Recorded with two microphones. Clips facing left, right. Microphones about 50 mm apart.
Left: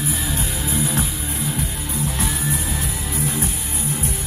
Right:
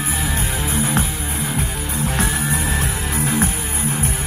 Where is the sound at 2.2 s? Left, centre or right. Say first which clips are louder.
Right 3 dB; right.